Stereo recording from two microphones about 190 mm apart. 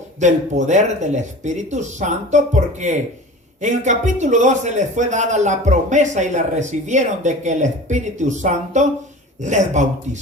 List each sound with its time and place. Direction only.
0.2 s a man's voice: 40° right (ahead or behind)